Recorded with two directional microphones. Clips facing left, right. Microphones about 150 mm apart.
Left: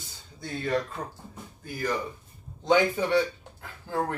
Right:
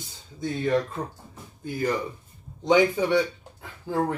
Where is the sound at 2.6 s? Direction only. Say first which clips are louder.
Right 3 dB; 15° right (ahead or behind).